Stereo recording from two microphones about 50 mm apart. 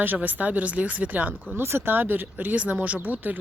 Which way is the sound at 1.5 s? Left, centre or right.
Right.